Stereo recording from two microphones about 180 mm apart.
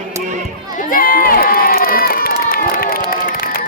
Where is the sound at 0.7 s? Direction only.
50° left (ahead or behind).